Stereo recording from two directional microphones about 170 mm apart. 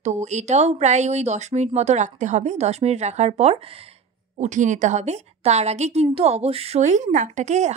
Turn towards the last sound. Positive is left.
turn(degrees=-40)  # may be behind; listen again after turning